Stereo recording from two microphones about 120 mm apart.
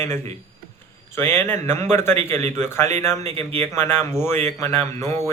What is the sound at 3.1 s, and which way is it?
Speech, 60° right (ahead or behind).